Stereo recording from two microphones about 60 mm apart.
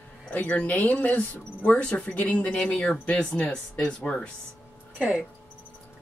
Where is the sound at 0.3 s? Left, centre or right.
Left.